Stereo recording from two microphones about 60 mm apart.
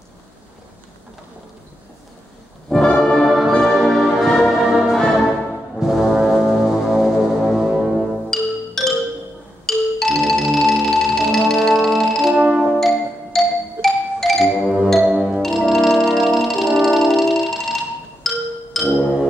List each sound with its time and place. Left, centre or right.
2.7 s music: centre
3.3 s music: centre
8.0 s music: centre
9.7 s marimba: centre
12.4 s music: centre
12.7 s music: centre
18.9 s music: centre